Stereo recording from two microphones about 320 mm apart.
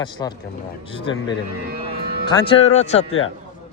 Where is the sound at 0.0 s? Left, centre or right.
Centre.